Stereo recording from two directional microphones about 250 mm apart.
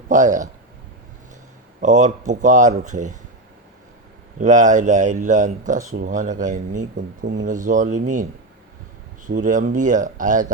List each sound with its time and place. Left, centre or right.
0.1 s speech: right
1.8 s speech: right
4.4 s speech: right